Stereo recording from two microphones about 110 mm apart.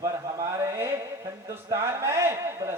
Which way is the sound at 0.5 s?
30° right (ahead or behind).